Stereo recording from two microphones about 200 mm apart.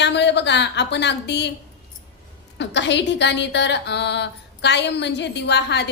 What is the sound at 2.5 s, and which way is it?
A woman's voice, 65° left (ahead or behind).